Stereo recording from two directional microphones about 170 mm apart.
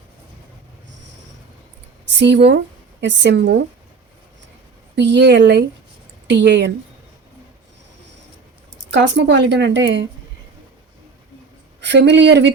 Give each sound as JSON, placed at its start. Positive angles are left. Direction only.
{"t": 2.0, "sound": "a woman's voice", "side_deg": -90}
{"t": 4.9, "sound": "a woman's voice", "side_deg": -90}
{"t": 8.9, "sound": "a woman's voice", "side_deg": -90}
{"t": 11.8, "sound": "a woman's voice", "side_deg": -90}